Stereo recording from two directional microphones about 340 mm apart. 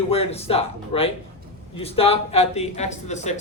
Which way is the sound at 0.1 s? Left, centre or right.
Centre.